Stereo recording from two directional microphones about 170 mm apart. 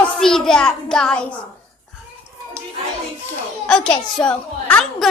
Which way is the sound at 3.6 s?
5° left (ahead or behind).